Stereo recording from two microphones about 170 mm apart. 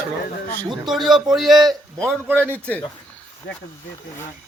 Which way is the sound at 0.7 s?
Centre (ahead or behind).